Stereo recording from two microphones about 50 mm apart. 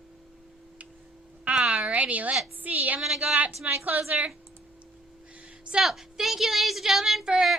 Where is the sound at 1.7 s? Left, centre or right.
Right.